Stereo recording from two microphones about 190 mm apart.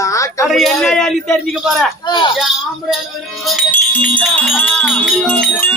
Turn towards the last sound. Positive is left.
turn(degrees=5)  # may be behind; listen again after turning